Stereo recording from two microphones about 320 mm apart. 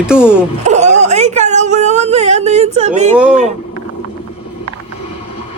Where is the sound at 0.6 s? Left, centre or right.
Right.